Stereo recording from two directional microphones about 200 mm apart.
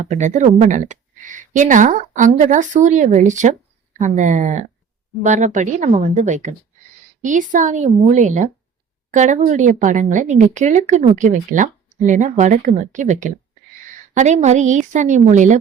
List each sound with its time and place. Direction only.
0.1 s speech: 35° right (ahead or behind)